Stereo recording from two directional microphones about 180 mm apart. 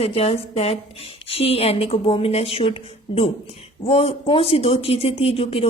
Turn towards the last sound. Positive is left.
turn(degrees=30)  # may be behind; listen again after turning